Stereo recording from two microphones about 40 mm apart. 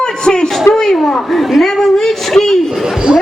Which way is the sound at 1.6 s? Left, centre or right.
Centre.